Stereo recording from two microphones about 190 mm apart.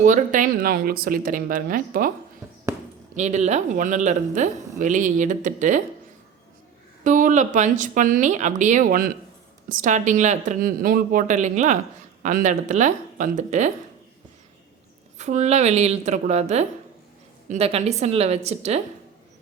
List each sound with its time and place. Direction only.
0.0 s speech: 40° right (ahead or behind)
2.4 s a sound: 15° right (ahead or behind)
3.2 s speech: 35° right (ahead or behind)
7.0 s speech: 40° right (ahead or behind)
15.2 s speech: 35° right (ahead or behind)